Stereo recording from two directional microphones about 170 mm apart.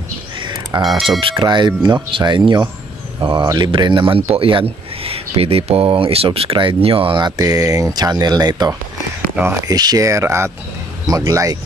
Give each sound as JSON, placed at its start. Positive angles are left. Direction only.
{"t": 0.7, "sound": "speech", "side_deg": -25}